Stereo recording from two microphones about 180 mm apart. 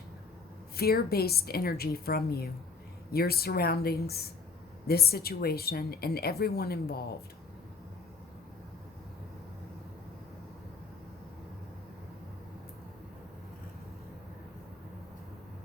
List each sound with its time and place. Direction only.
0.8 s a woman's voice: 60° left (ahead or behind)